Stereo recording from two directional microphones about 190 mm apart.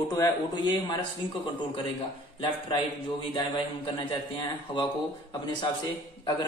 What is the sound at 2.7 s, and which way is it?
A man's voice, 25° left (ahead or behind).